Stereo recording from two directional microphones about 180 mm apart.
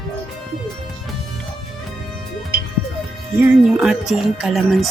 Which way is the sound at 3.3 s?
5° right (ahead or behind).